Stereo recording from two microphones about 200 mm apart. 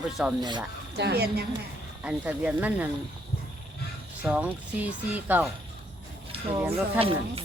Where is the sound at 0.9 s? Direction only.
55° right (ahead or behind).